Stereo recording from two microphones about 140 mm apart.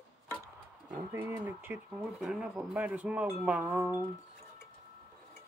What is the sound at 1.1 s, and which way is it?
Speech, 15° right (ahead or behind).